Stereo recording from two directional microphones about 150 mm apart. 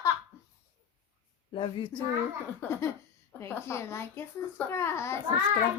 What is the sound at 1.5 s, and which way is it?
Speech, 35° left (ahead or behind).